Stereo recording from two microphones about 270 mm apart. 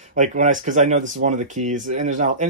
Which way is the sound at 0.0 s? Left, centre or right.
Right.